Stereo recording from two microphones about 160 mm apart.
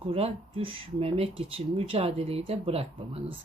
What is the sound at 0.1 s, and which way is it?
A woman's voice, 35° right (ahead or behind).